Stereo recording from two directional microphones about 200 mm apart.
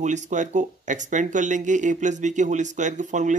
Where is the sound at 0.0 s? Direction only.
35° right (ahead or behind).